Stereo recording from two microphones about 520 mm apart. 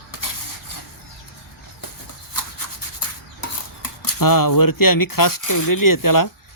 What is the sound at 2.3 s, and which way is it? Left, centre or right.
Rub, left.